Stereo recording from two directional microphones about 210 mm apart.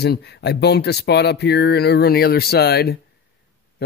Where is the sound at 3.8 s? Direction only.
50° left (ahead or behind).